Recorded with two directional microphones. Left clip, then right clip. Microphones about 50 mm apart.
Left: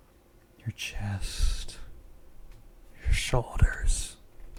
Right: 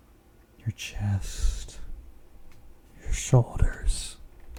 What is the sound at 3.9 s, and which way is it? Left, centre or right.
Speech, centre.